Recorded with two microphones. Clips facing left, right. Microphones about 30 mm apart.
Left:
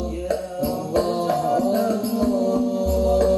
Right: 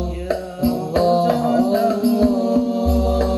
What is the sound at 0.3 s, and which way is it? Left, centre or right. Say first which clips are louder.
Music: right 4 dB; right.